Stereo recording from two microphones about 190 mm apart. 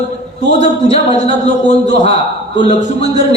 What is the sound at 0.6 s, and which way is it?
Speech, 35° left (ahead or behind).